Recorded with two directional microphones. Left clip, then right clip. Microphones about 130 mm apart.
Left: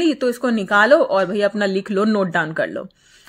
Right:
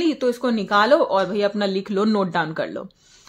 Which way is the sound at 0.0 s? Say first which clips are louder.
Left 2 dB; 25° left (ahead or behind).